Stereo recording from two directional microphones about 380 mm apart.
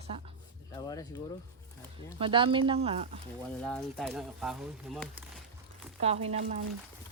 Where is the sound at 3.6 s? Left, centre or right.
Centre.